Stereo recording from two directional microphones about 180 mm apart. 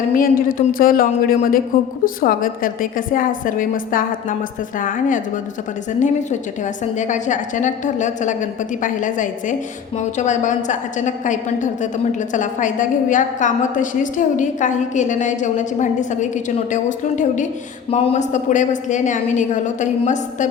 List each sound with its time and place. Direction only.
0.2 s a woman's voice: 50° left (ahead or behind)
7.0 s a woman's voice: 45° left (ahead or behind)